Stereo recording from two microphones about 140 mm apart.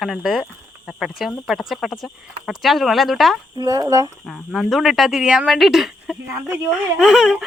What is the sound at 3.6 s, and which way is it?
Speech, 30° right (ahead or behind).